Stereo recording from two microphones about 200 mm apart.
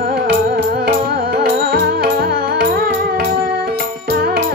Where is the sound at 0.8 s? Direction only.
50° right (ahead or behind).